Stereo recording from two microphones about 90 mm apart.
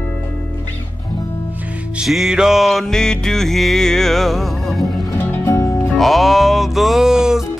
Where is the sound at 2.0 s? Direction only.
Centre (ahead or behind).